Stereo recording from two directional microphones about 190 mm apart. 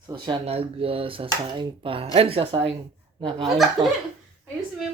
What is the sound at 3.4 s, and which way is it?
Speech, centre (ahead or behind).